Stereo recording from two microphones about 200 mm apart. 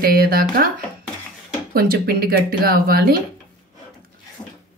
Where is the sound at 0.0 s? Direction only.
50° right (ahead or behind).